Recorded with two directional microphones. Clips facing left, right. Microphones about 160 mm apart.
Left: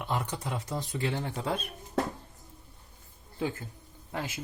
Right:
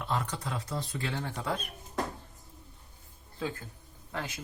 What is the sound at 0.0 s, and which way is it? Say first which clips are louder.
Speech: left 1 dB; 20° left (ahead or behind).